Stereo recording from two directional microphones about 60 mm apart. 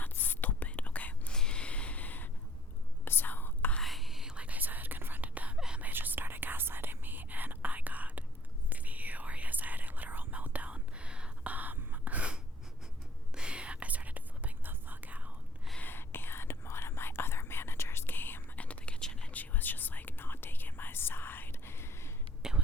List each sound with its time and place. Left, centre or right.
0.0 s whispering: left
1.3 s a sound: centre; by 2.3 s left
3.0 s whispering: left
3.8 s whispering: centre
4.4 s whispering: right
5.5 s whispering: centre
5.8 s whispering: right
15.8 s whispering: left
18.5 s whispering: left
19.3 s whispering: left
22.4 s whispering: centre